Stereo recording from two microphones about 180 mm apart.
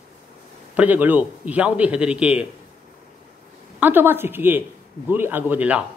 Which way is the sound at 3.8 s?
10° right (ahead or behind).